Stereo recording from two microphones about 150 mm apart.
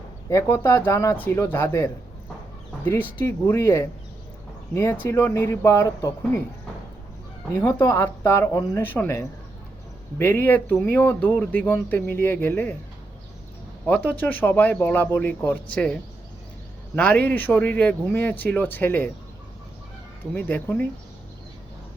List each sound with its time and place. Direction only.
0.3 s speech: 20° left (ahead or behind)
7.5 s speech: 15° left (ahead or behind)
13.8 s speech: 10° left (ahead or behind)
20.3 s speech: 10° left (ahead or behind)